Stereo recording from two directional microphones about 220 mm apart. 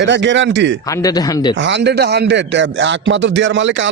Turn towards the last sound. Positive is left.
turn(degrees=-55)  # may be behind; listen again after turning